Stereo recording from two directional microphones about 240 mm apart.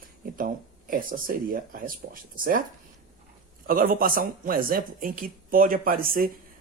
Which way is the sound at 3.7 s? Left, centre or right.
Right.